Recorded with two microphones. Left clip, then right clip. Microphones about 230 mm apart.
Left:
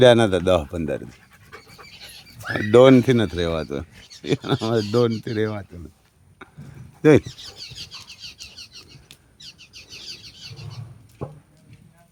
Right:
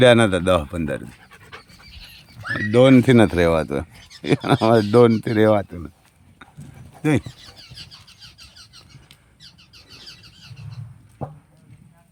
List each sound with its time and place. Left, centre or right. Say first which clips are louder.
0.0 s speech: even; centre
2.7 s speech: left 2 dB; centre
3.1 s speech: right 6 dB; centre
6.4 s a sound: left 2 dB; centre
7.0 s speech: left 7 dB; centre